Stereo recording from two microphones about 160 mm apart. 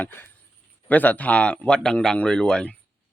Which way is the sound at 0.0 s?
15° left (ahead or behind).